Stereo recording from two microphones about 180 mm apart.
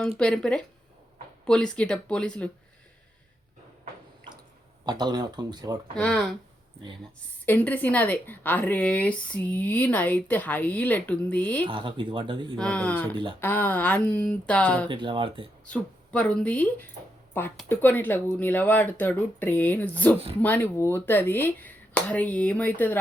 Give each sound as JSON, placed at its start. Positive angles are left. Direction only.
{"t": 0.2, "sound": "speech", "side_deg": 5}
{"t": 4.9, "sound": "speech", "side_deg": -25}
{"t": 6.0, "sound": "speech", "side_deg": 5}
{"t": 7.4, "sound": "a woman's voice", "side_deg": 10}
{"t": 11.6, "sound": "speech", "side_deg": -25}
{"t": 12.5, "sound": "a woman's voice", "side_deg": 5}
{"t": 14.8, "sound": "speech", "side_deg": -30}
{"t": 15.6, "sound": "a woman's voice", "side_deg": 5}